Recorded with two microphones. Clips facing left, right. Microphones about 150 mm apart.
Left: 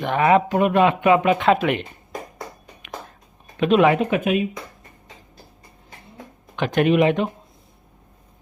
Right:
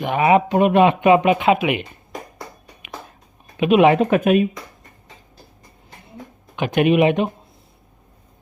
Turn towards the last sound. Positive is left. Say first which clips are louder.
# right 2 dB
turn(degrees=-15)  # may be behind; listen again after turning